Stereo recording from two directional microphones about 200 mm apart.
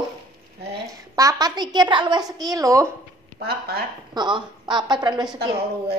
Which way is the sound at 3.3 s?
50° right (ahead or behind).